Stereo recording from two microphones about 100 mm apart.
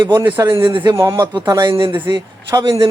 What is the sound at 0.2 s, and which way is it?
Speech, 30° right (ahead or behind).